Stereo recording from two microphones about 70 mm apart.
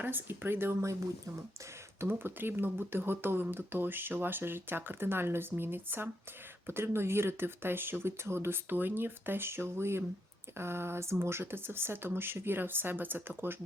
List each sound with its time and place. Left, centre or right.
0.0 s speech: right
2.0 s speech: right